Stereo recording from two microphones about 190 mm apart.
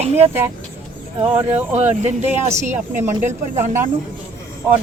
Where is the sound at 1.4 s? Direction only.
30° right (ahead or behind).